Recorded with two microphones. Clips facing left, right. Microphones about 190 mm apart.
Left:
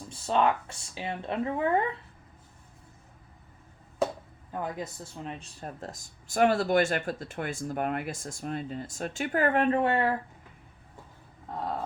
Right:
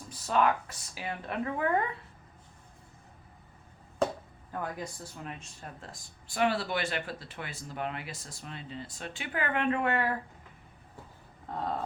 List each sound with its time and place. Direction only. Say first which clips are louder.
0.1 s speech: left 1 dB; 30° left (ahead or behind)
4.5 s speech: left 2 dB; 20° left (ahead or behind)
11.4 s a sound: even; 5° left (ahead or behind)